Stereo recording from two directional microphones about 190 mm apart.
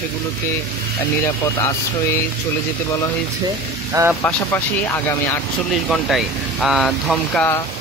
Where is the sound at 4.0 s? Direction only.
15° right (ahead or behind).